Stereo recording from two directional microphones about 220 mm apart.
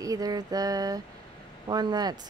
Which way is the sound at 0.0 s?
15° right (ahead or behind).